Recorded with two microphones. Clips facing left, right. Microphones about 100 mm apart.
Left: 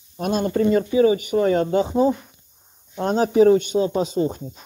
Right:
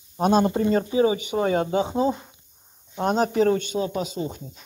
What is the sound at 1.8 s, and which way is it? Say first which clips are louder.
Speech: left 4 dB; 20° right (ahead or behind).